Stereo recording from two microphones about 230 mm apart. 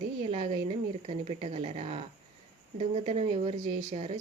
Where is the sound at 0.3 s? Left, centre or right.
Right.